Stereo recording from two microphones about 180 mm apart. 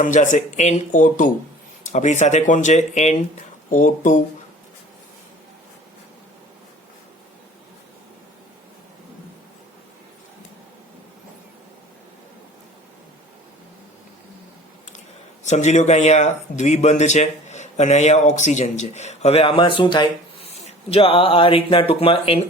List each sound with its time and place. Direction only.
0.0 s speech: 45° left (ahead or behind)
15.4 s speech: 40° left (ahead or behind)